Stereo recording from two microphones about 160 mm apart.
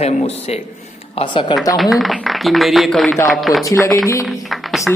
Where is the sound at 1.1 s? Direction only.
30° left (ahead or behind).